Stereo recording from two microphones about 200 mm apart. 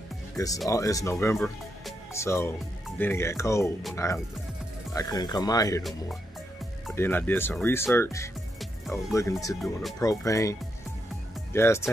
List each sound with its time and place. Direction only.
0.7 s speech: 15° left (ahead or behind)
7.0 s speech: 10° left (ahead or behind)
8.5 s music: centre (ahead or behind)
9.1 s speech: 15° left (ahead or behind)
9.6 s speech: centre (ahead or behind)
9.9 s speech: 15° left (ahead or behind)